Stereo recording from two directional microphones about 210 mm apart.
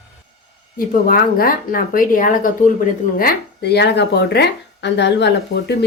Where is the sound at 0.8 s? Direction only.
45° left (ahead or behind).